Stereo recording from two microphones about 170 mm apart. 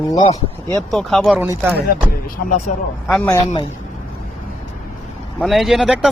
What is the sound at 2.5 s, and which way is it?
Speech, 45° left (ahead or behind).